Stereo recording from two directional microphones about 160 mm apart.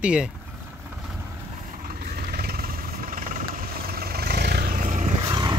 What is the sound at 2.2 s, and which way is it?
Vehicle, 75° right (ahead or behind).